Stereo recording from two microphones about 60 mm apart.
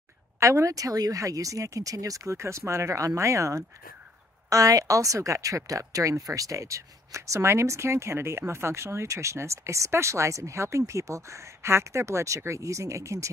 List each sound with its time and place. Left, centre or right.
0.4 s speech: right
4.5 s speech: right